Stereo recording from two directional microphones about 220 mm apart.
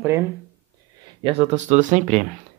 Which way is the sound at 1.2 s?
25° right (ahead or behind).